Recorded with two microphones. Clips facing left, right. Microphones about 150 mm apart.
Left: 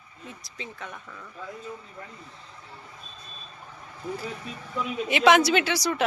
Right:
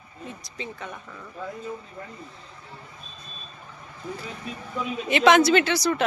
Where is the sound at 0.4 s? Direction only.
Centre (ahead or behind).